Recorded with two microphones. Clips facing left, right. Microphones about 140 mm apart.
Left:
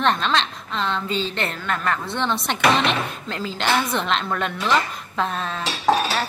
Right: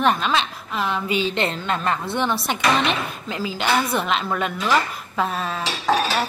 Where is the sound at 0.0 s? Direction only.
5° right (ahead or behind).